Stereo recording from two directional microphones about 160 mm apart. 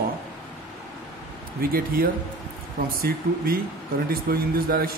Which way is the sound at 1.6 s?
65° right (ahead or behind).